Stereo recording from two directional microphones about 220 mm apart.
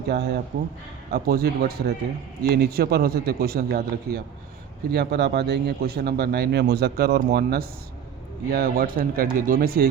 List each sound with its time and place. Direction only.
0.1 s a man's voice: 50° right (ahead or behind)